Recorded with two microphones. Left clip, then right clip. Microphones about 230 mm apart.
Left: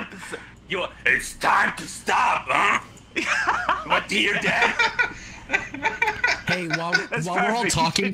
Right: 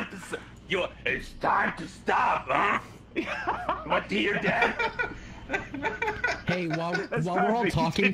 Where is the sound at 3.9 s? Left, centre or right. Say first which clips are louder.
Left 4 dB; left.